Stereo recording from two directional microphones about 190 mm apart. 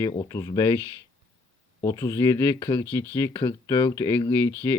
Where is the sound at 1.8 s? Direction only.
15° left (ahead or behind).